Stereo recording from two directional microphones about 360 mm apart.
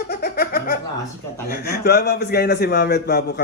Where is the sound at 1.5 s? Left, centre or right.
Left.